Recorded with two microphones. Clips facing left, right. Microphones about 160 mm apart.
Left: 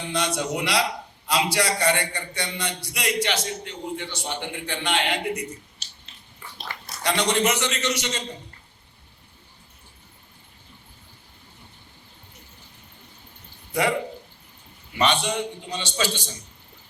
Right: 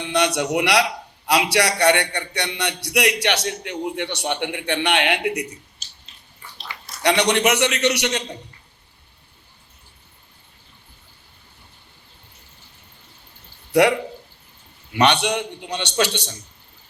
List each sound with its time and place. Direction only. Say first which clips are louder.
0.0 s a man's voice: right 5 dB; 70° right (ahead or behind)
7.0 s a man's voice: right 5 dB; 70° right (ahead or behind)
14.9 s a man's voice: right 4 dB; 75° right (ahead or behind)